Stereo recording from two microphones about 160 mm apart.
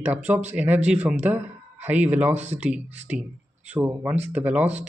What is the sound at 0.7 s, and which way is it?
Speech, 45° right (ahead or behind).